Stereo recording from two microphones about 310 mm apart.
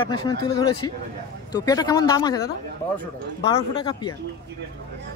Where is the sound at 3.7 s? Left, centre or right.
Centre.